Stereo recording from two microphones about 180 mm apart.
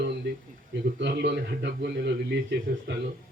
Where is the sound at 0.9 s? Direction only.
80° right.